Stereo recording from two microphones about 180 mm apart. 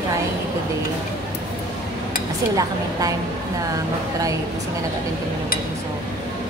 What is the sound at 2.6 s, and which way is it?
Speech, 20° right (ahead or behind).